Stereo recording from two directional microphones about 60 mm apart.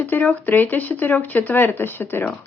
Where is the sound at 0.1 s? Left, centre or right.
Left.